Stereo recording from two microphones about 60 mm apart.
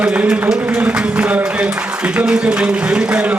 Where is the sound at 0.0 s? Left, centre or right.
Centre.